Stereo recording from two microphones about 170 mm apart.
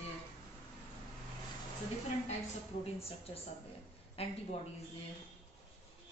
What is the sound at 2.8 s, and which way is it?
A woman's voice, 35° left (ahead or behind).